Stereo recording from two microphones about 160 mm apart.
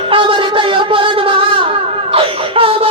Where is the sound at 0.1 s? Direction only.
30° right (ahead or behind).